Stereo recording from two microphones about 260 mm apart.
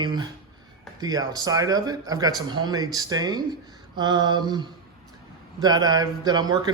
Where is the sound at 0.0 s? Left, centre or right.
Centre.